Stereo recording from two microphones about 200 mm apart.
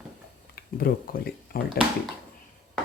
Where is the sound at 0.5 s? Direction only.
50° left (ahead or behind).